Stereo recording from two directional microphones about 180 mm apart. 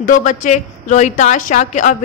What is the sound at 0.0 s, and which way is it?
A woman's voice, 45° left (ahead or behind).